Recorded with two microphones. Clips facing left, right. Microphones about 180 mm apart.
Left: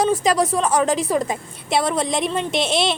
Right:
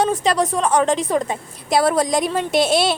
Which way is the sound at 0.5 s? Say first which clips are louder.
Right 1 dB; 5° left (ahead or behind).